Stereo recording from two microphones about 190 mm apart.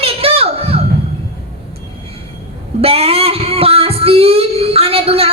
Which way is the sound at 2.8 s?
30° right (ahead or behind).